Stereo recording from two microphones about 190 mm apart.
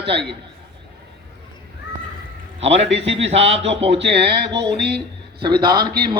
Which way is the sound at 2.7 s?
70° right (ahead or behind).